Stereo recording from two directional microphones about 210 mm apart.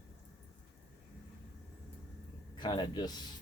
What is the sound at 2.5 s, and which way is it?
Speech, 20° left (ahead or behind).